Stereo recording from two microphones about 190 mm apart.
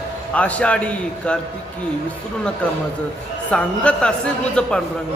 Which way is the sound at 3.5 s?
5° left (ahead or behind).